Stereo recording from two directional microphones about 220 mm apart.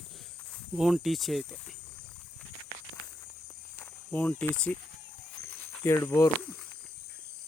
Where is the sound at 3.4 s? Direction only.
10° left (ahead or behind).